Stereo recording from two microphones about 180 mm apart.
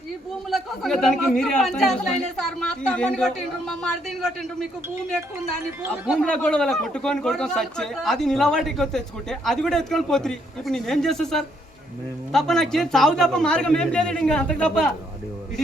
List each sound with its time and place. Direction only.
0.5 s a man's voice: centre (ahead or behind)
6.1 s a man's voice: 5° left (ahead or behind)